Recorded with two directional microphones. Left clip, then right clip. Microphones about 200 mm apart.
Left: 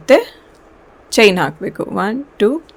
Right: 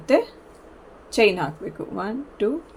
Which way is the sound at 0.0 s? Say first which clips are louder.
Left 9 dB; 55° left (ahead or behind).